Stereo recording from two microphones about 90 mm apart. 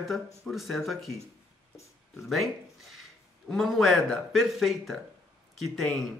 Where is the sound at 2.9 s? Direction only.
Centre (ahead or behind).